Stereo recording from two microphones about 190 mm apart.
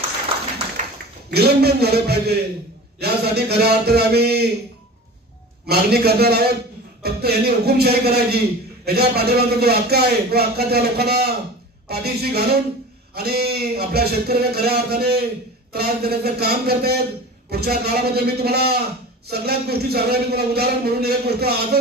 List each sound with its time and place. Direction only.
1.3 s a man's voice: 55° right (ahead or behind)
5.7 s a man's voice: 55° right (ahead or behind)